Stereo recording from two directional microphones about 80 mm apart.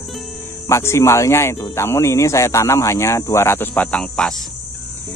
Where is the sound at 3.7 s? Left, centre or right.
Centre.